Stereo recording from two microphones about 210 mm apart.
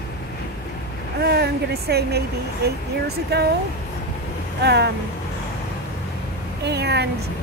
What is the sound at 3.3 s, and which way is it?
Speech, 50° right (ahead or behind).